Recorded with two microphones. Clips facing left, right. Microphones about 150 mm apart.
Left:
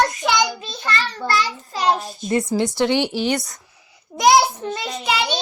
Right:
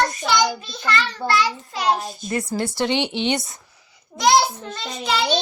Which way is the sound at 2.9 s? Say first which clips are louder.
Left 2 dB; 20° right (ahead or behind).